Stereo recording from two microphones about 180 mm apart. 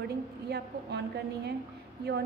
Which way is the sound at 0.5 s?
65° right (ahead or behind).